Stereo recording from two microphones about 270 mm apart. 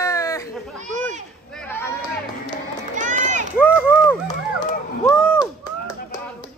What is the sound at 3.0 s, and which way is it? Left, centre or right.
Run, right.